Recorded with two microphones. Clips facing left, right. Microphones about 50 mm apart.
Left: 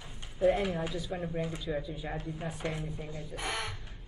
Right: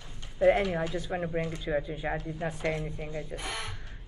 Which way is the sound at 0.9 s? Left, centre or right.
Right.